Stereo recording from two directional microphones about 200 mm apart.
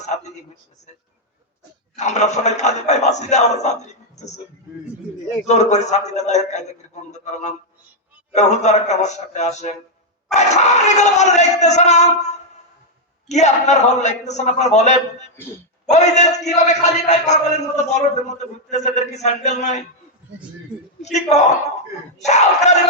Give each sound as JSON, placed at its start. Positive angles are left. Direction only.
{"t": 2.0, "sound": "speech", "side_deg": 35}
{"t": 5.5, "sound": "speech", "side_deg": 35}
{"t": 8.3, "sound": "speech", "side_deg": 35}
{"t": 21.0, "sound": "speech", "side_deg": 35}